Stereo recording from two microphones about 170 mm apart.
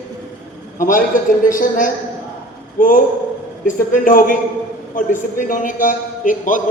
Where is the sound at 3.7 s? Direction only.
50° left (ahead or behind).